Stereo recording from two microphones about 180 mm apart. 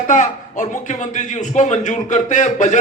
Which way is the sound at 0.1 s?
45° left (ahead or behind).